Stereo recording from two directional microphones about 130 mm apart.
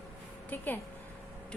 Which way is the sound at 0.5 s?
15° left (ahead or behind).